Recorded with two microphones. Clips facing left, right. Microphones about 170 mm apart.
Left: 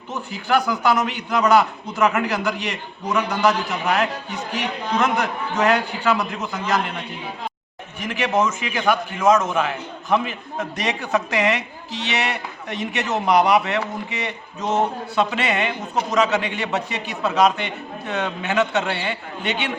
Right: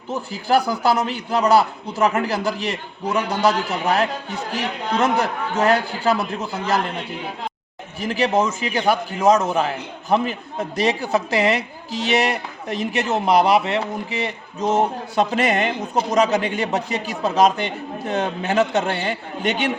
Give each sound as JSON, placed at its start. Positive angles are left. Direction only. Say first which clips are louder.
{"t": 0.1, "sound": "a man's voice", "louder": "right 2 dB", "side_deg": -35}
{"t": 7.9, "sound": "a man's voice", "louder": "right 2 dB", "side_deg": -35}